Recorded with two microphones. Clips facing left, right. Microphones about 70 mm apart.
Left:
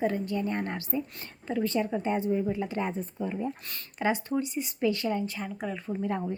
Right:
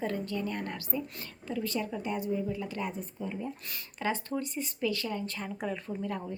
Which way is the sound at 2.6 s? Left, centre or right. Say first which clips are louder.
Left 5 dB; left.